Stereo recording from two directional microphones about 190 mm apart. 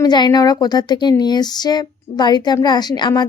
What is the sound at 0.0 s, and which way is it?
Speech, 20° left (ahead or behind).